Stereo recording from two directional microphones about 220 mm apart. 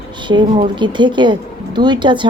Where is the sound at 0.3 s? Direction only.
20° right (ahead or behind).